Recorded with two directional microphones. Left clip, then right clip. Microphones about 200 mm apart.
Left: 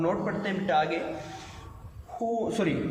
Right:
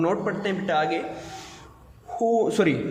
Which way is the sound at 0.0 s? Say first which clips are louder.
Right 4 dB; 50° right (ahead or behind).